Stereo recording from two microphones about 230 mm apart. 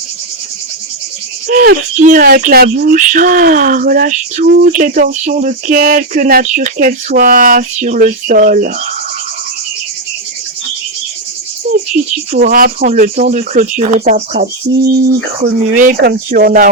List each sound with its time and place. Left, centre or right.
1.5 s speech: right
12.3 s speech: right
16.0 s speech: right
16.3 s speech: right